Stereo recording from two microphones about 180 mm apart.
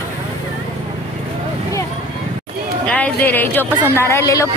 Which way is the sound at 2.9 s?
10° left (ahead or behind).